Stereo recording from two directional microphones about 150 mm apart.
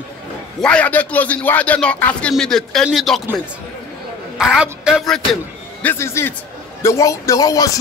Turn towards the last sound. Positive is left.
turn(degrees=25)  # may be behind; listen again after turning